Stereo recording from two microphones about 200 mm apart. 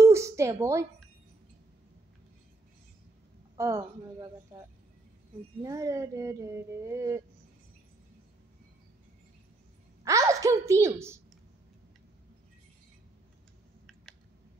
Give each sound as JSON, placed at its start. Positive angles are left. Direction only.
{"t": 0.0, "sound": "a sound", "side_deg": -15}
{"t": 3.5, "sound": "speech", "side_deg": -15}
{"t": 5.6, "sound": "speech", "side_deg": -15}
{"t": 10.0, "sound": "a woman's voice", "side_deg": -15}